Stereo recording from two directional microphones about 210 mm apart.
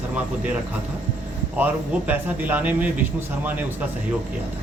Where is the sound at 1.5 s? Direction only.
5° right (ahead or behind).